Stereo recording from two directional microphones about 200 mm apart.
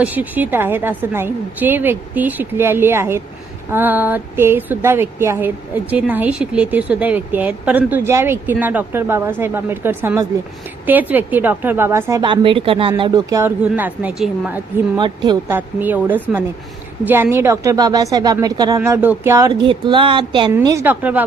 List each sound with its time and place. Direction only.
0.0 s speech: 10° right (ahead or behind); by 12.9 s 25° right (ahead or behind)
13.0 s speech: 15° right (ahead or behind)
14.9 s a woman's voice: 20° right (ahead or behind)
15.4 s speech: 10° right (ahead or behind); by 20.5 s 25° right (ahead or behind)
20.5 s speech: 15° right (ahead or behind)